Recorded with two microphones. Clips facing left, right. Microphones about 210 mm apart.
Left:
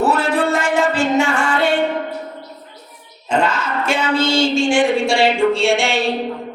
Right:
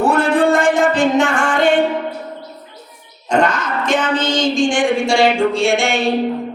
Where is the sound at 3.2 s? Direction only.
5° left (ahead or behind).